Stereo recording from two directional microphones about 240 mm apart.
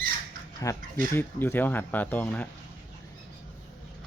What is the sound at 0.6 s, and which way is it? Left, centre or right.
Speech, centre.